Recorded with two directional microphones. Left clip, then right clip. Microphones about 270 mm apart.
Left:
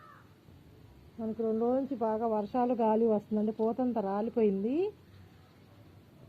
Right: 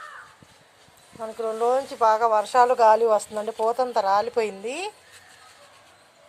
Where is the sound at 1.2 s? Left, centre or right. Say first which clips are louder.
Right 7 dB; right.